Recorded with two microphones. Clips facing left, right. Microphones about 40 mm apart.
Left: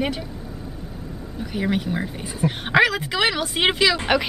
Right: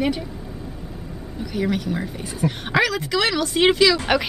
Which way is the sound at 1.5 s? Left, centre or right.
Centre.